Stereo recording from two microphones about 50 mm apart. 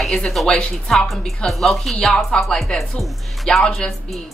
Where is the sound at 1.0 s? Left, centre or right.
Centre.